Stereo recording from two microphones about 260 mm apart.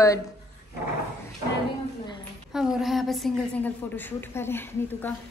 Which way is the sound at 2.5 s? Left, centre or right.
Centre.